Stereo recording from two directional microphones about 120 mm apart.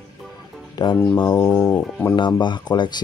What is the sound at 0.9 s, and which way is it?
Speech, 20° left (ahead or behind).